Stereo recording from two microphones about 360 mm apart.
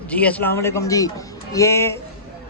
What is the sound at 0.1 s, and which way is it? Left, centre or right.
A man's voice, centre.